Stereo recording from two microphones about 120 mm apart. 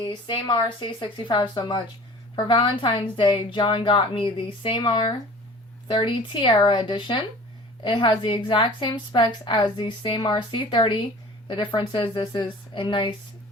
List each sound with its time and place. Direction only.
0.0 s a woman's voice: 40° left (ahead or behind)